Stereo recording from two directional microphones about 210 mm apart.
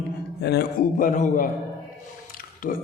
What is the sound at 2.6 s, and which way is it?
Speech, 40° left (ahead or behind).